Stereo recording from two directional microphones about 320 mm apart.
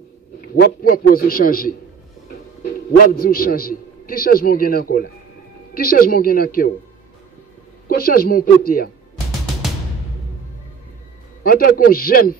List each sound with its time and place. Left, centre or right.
0.6 s a man's voice: left
3.0 s a man's voice: left
7.9 s a man's voice: left
11.4 s a man's voice: left